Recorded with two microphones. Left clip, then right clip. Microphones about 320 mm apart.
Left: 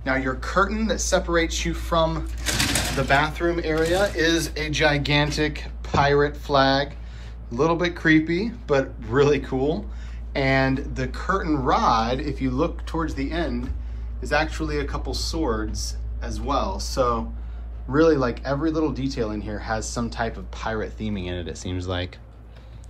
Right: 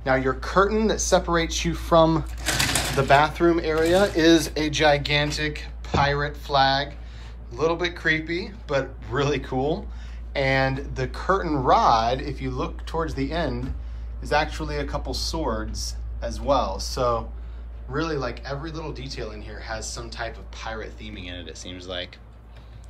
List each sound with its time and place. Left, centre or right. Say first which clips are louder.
0.0 s speech: right 2 dB; centre